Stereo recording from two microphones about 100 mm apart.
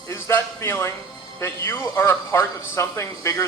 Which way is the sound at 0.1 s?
25° left (ahead or behind).